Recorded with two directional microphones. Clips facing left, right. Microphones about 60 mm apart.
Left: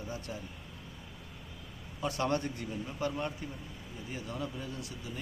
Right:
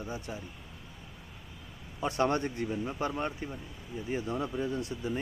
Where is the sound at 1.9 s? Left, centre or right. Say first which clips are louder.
Right 3 dB; right.